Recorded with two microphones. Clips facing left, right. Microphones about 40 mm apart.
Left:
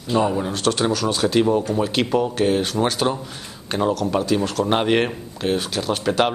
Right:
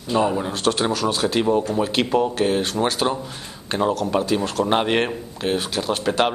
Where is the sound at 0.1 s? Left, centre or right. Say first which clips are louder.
Even; centre.